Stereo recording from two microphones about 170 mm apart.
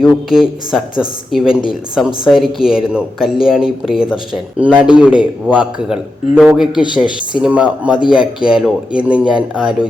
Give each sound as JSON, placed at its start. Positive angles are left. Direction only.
{"t": 0.0, "sound": "a man's voice", "side_deg": 0}